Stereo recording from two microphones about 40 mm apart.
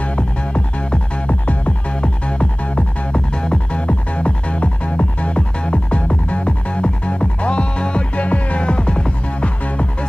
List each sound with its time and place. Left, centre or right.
2.0 s music: left